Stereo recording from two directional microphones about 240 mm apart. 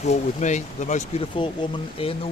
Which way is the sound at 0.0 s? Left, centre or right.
Left.